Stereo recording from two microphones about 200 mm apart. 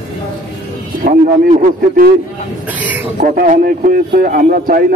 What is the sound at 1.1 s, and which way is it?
A man's voice, 45° right (ahead or behind).